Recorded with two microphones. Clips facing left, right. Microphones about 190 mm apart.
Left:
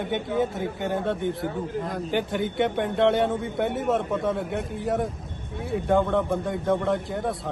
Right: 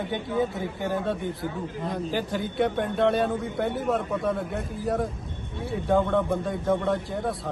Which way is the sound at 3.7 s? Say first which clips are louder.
Left 2 dB; centre (ahead or behind).